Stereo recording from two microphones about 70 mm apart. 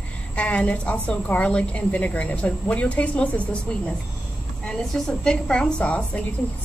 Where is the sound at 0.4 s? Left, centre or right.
Centre.